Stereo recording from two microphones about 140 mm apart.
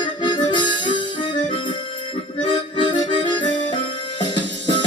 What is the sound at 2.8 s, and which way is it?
Accordion, 35° left (ahead or behind).